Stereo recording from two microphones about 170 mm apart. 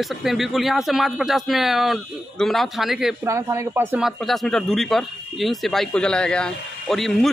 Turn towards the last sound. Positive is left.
turn(degrees=0)  # may be behind; listen again after turning